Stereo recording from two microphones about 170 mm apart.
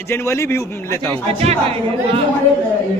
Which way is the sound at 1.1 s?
35° right (ahead or behind).